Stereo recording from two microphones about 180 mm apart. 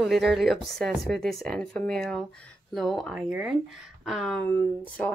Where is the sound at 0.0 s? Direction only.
Centre (ahead or behind).